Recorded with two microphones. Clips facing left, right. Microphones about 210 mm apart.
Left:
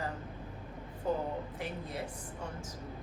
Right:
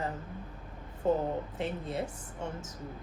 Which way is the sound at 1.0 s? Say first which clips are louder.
Right 5 dB; 25° right (ahead or behind).